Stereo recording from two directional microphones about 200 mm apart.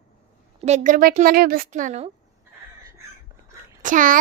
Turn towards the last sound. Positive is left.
turn(degrees=-40)  # may be behind; listen again after turning